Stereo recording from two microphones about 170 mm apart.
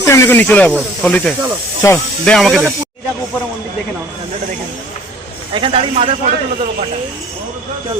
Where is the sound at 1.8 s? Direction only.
15° left (ahead or behind).